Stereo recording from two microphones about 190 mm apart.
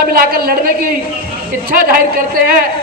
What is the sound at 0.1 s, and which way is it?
A man's voice, 50° right (ahead or behind).